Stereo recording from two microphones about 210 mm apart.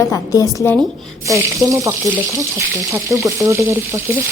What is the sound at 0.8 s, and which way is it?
Speech, centre (ahead or behind).